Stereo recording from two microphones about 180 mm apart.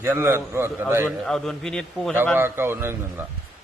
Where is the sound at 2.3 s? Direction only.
10° right (ahead or behind).